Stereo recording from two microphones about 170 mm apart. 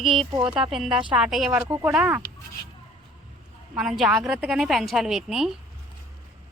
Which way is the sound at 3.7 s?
5° right (ahead or behind).